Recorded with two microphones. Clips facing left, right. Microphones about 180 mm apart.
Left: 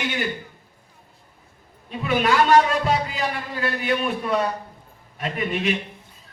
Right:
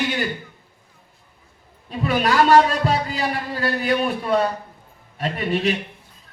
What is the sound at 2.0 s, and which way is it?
A man's voice, 35° right (ahead or behind).